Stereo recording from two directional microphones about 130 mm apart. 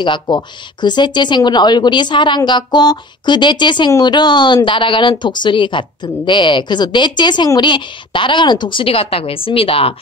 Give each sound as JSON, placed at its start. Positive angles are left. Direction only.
{"t": 0.0, "sound": "a woman's voice", "side_deg": 35}